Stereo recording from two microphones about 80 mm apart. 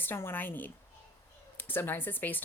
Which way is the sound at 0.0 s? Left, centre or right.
Left.